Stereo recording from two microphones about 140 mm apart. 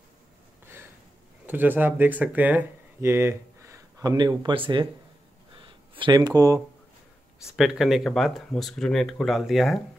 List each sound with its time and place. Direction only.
1.4 s speech: 15° right (ahead or behind); by 4.8 s 35° right (ahead or behind)
5.5 s a sound: 35° right (ahead or behind)
7.5 s speech: 5° right (ahead or behind)